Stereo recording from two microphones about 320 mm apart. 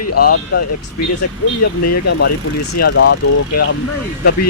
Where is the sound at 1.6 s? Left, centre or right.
Left.